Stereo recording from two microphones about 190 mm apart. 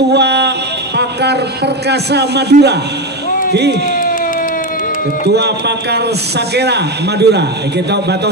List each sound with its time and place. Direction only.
0.1 s a sound: 60° right (ahead or behind)
0.9 s fire alarm: 60° right (ahead or behind)
1.9 s a man's voice: 60° right (ahead or behind)
5.3 s a man's voice: 60° right (ahead or behind)